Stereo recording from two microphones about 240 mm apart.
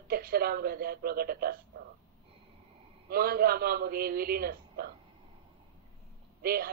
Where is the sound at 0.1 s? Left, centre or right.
Right.